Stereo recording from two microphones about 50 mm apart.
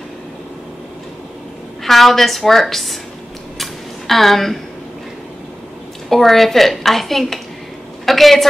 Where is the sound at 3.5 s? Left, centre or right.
Centre.